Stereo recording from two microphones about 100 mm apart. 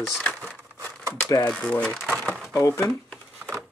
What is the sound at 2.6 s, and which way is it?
Speech, 30° left (ahead or behind).